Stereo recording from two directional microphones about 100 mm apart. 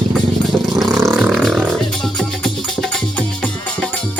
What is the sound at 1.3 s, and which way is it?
Music, 5° left (ahead or behind).